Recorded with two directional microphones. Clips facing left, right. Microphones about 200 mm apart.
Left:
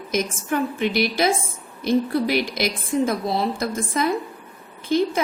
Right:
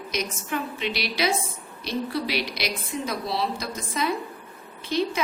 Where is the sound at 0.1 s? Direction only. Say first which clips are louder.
Left 6 dB; 50° left (ahead or behind).